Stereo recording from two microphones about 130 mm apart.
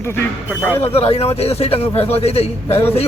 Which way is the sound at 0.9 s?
50° left (ahead or behind).